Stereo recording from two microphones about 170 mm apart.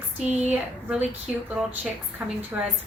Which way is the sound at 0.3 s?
10° right (ahead or behind).